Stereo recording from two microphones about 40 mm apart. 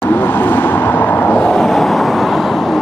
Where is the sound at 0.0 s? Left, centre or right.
Left.